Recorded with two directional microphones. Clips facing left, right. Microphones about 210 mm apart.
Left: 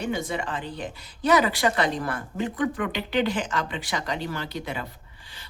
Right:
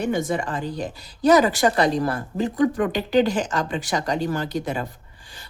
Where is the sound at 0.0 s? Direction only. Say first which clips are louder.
Right 5 dB; 50° right (ahead or behind).